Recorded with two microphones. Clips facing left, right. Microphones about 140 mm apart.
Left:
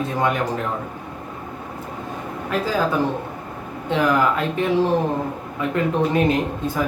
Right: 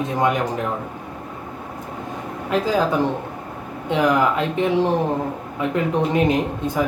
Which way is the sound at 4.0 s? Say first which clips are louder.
Right 1 dB; 20° right (ahead or behind).